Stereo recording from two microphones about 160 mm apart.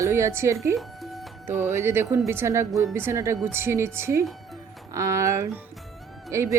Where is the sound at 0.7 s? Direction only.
Centre (ahead or behind).